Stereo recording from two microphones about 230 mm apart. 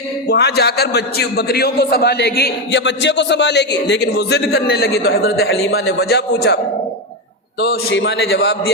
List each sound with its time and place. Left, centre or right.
0.3 s a man's voice: left
7.6 s a man's voice: left